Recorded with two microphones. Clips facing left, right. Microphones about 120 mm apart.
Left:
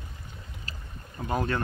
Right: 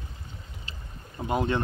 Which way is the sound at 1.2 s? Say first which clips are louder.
Right 2 dB; 20° right (ahead or behind).